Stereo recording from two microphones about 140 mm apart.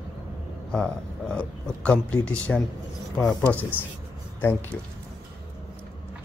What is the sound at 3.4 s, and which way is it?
Speech, 10° left (ahead or behind).